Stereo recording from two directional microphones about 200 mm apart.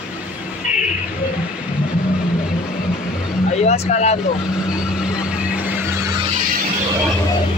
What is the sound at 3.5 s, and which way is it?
Vehicle, 35° left (ahead or behind).